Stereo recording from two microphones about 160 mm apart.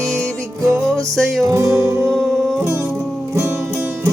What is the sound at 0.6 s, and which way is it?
Music, 20° right (ahead or behind).